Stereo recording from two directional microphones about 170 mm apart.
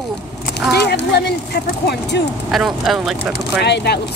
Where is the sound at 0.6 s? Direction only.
80° left.